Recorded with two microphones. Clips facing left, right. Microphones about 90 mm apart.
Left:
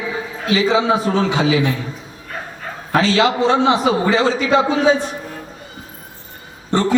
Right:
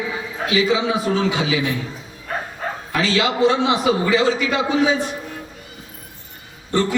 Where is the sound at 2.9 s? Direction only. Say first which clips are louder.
Left 5 dB; 35° left (ahead or behind).